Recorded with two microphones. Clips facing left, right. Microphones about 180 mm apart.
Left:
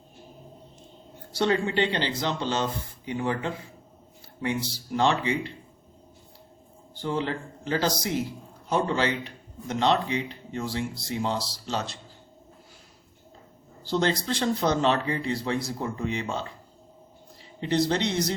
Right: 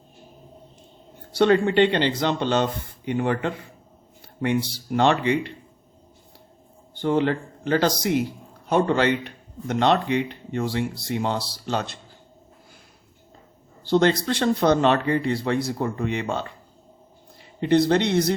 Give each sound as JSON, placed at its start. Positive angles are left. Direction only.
{"t": 1.3, "sound": "speech", "side_deg": -60}
{"t": 6.9, "sound": "speech", "side_deg": -60}
{"t": 13.8, "sound": "speech", "side_deg": -60}
{"t": 17.6, "sound": "speech", "side_deg": -55}